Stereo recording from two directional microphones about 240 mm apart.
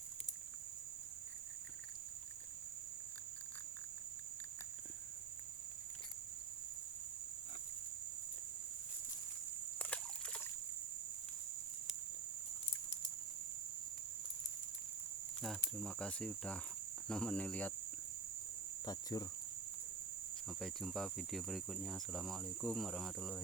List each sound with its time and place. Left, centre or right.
9.7 s trickle: centre
15.8 s speech: centre
18.9 s speech: centre
20.5 s speech: centre